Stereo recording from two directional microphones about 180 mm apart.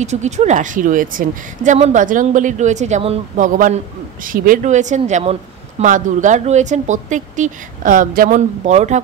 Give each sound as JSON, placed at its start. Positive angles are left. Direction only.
{"t": 0.0, "sound": "speech", "side_deg": -40}
{"t": 3.3, "sound": "a man's voice", "side_deg": -45}